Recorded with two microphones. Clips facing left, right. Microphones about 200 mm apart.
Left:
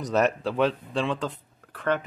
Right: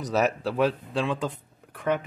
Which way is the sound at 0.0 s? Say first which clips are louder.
Left 1 dB; 5° right (ahead or behind).